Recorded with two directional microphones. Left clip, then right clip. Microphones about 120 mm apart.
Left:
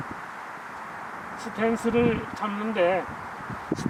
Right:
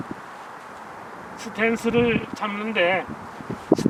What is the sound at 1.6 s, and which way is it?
Speech, 25° right (ahead or behind).